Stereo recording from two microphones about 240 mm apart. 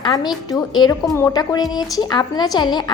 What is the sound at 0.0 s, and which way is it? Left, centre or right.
A woman's voice, centre.